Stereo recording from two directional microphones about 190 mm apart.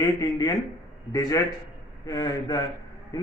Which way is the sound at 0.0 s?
20° left (ahead or behind).